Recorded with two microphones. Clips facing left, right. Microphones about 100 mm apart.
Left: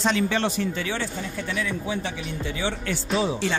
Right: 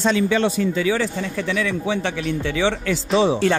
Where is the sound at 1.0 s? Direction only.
90° right.